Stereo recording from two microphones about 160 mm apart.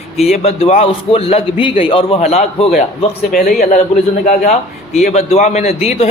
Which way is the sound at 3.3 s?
60° left (ahead or behind).